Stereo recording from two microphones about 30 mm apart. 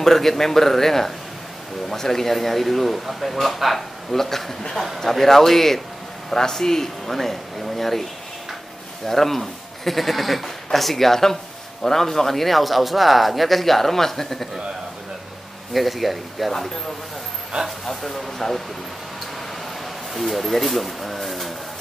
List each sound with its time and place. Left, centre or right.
0.0 s speech: centre
9.0 s speech: centre
15.7 s speech: centre
17.6 s speech: centre
20.2 s speech: centre